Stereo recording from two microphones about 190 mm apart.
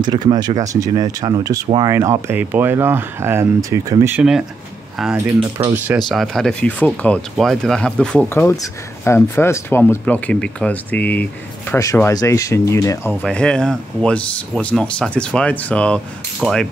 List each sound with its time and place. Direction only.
0.0 s speech: 20° right (ahead or behind); by 13.1 s 15° left (ahead or behind)
13.1 s speech: 5° left (ahead or behind)